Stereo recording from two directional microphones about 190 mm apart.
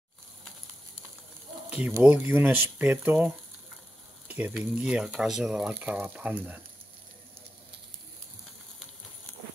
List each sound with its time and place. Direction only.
1.7 s speech: 5° right (ahead or behind)